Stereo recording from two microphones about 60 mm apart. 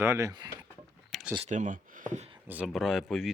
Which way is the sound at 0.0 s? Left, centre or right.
Right.